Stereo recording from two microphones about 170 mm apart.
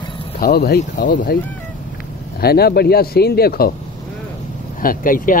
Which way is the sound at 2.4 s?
65° left (ahead or behind).